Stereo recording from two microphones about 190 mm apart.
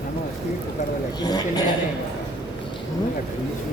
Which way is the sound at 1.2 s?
20° left (ahead or behind).